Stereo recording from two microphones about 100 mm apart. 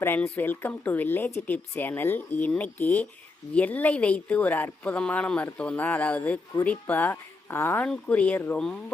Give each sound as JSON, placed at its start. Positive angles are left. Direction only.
{"t": 0.0, "sound": "speech", "side_deg": 20}
{"t": 7.9, "sound": "speech", "side_deg": 10}